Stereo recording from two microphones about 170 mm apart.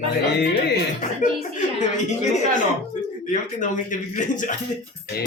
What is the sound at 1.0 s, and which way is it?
Speech, 50° left (ahead or behind).